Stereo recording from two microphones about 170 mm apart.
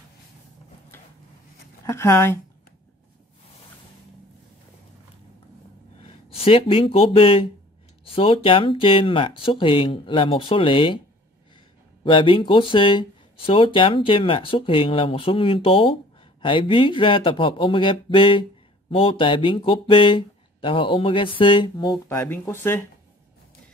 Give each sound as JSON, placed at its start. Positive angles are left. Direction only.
{"t": 1.9, "sound": "speech", "side_deg": 15}
{"t": 6.0, "sound": "speech", "side_deg": 35}
{"t": 12.0, "sound": "speech", "side_deg": 30}
{"t": 22.0, "sound": "speech", "side_deg": 15}